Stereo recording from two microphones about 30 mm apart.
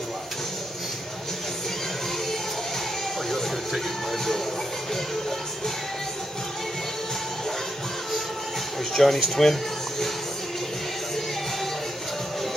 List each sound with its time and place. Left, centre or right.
8.9 s speech: centre